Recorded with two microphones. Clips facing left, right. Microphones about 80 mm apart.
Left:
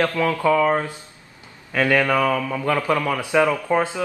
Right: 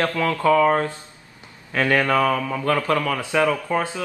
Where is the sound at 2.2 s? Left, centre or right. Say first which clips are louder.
Even; centre.